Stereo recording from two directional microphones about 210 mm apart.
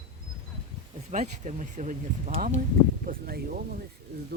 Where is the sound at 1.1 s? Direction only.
35° right (ahead or behind).